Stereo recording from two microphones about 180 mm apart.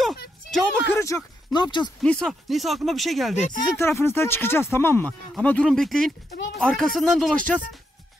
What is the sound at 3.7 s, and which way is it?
Speech, 15° left (ahead or behind).